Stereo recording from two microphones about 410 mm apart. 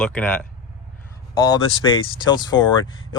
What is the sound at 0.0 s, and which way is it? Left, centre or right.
Speech, centre.